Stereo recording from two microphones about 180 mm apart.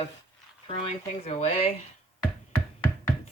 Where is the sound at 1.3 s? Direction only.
35° left (ahead or behind).